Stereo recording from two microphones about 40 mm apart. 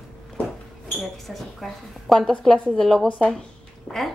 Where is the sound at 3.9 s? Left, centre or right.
Left.